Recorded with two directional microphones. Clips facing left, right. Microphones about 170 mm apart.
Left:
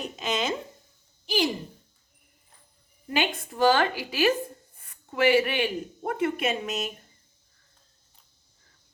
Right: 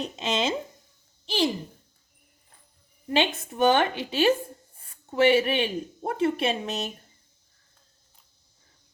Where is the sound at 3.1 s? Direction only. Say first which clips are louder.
Right 3 dB; 25° right (ahead or behind).